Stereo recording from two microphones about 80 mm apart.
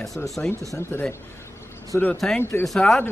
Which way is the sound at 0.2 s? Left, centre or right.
Left.